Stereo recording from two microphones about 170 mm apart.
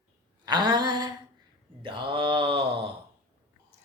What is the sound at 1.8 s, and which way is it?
Mantra, 30° right (ahead or behind).